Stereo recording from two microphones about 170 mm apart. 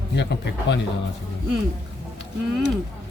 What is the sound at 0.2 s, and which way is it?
Speech, 90° left.